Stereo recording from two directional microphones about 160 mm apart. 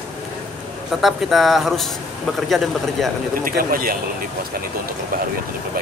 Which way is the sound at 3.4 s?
65° right (ahead or behind).